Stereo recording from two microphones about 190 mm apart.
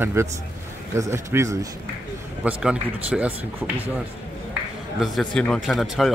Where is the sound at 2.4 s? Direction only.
5° right (ahead or behind).